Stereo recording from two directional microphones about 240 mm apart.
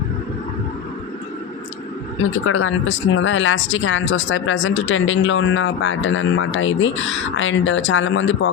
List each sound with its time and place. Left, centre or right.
2.1 s speech: left